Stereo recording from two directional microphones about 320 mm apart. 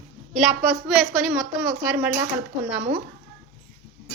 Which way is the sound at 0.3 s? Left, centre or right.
Centre.